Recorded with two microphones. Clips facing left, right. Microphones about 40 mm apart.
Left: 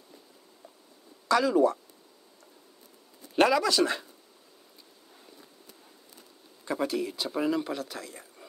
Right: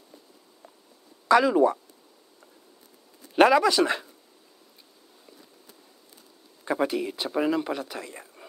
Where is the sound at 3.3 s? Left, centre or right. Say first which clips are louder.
Right 5 dB; centre.